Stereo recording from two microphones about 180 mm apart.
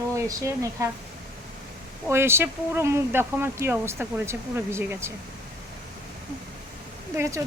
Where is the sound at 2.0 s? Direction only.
15° right (ahead or behind).